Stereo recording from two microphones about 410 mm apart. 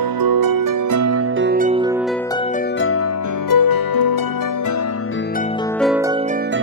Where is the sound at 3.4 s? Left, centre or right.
Left.